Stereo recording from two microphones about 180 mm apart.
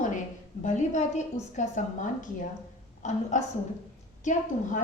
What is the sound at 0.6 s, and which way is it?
A woman's voice, 40° left (ahead or behind).